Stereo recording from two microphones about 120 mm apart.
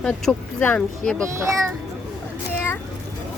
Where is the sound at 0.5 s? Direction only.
10° left (ahead or behind).